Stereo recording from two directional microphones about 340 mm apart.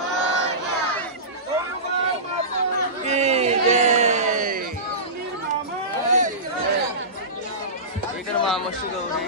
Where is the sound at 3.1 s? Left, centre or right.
Centre.